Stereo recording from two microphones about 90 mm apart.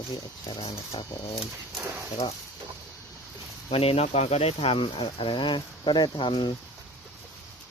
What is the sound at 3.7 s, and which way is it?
Speech, 90° left.